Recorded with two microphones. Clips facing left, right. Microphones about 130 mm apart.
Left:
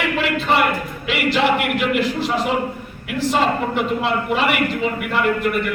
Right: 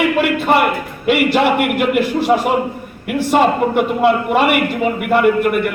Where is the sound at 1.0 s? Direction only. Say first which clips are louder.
Right 5 dB; 55° right (ahead or behind).